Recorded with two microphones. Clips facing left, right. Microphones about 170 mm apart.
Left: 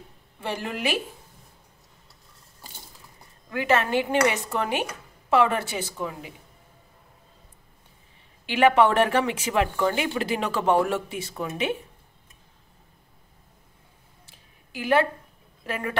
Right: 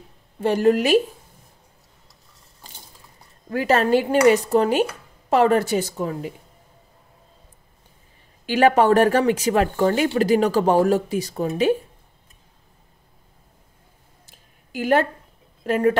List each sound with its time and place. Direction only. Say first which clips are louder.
0.4 s a woman's voice: right 12 dB; 45° right (ahead or behind)
3.4 s speech: right 4 dB; 40° right (ahead or behind)
8.5 s speech: right 3 dB; 40° right (ahead or behind)
14.2 s a sound: right 1 dB; 45° right (ahead or behind)
15.6 s speech: right 12 dB; 40° right (ahead or behind)